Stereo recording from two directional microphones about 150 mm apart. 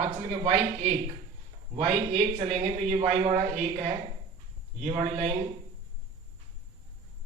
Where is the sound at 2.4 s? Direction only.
50° right (ahead or behind).